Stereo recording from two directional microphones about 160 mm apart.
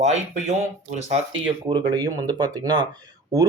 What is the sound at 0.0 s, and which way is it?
Speech, 45° right (ahead or behind).